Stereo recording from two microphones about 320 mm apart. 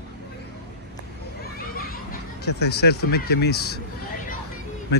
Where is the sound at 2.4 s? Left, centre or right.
Left.